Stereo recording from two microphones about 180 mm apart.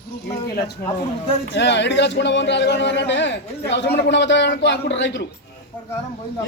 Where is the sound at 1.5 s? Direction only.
75° left (ahead or behind).